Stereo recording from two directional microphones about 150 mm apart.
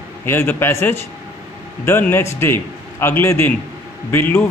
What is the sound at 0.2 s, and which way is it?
A man's voice, 15° left (ahead or behind).